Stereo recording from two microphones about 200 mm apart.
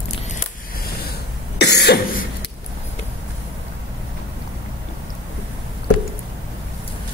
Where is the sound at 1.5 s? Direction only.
55° left (ahead or behind).